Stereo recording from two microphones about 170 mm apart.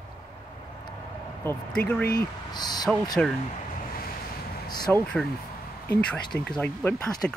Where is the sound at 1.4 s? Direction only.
10° left (ahead or behind).